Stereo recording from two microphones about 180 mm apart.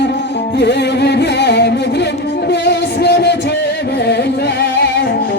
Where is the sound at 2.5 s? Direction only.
70° left (ahead or behind).